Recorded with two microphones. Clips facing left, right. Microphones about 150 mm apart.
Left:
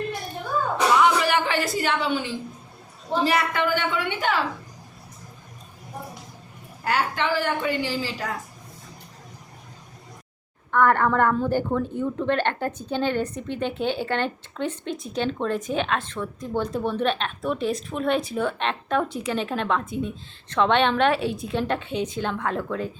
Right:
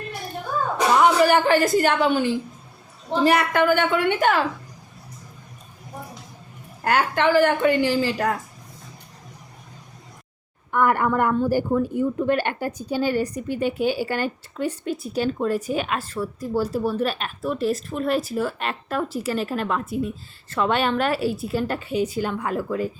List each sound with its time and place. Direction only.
0.9 s a woman's voice: 45° right (ahead or behind)
6.8 s a woman's voice: 55° right (ahead or behind)
10.7 s speech: 10° right (ahead or behind)